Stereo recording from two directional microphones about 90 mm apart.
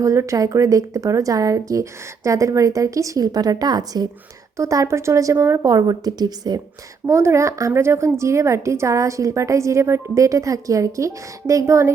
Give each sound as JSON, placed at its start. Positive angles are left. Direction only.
{"t": 0.0, "sound": "a woman's voice", "side_deg": -35}
{"t": 4.5, "sound": "a woman's voice", "side_deg": -35}
{"t": 7.1, "sound": "a woman's voice", "side_deg": -30}